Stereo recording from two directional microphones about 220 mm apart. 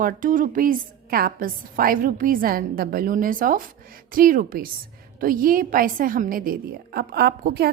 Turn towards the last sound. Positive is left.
turn(degrees=-45)  # may be behind; listen again after turning